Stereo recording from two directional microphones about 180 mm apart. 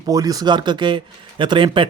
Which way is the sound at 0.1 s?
20° right (ahead or behind).